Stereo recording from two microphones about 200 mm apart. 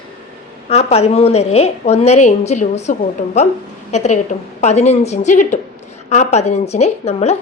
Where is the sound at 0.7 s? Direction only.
30° left (ahead or behind).